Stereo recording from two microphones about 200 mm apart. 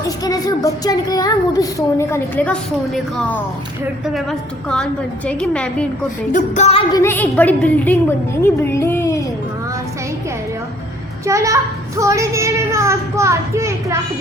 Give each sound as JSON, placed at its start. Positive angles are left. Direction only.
{"t": 0.3, "sound": "a woman's voice", "side_deg": 20}
{"t": 6.3, "sound": "music", "side_deg": 35}
{"t": 6.9, "sound": "a woman's voice", "side_deg": 10}
{"t": 11.3, "sound": "a child's voice", "side_deg": -15}